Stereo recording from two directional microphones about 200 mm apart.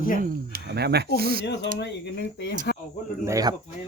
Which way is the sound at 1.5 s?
55° left (ahead or behind).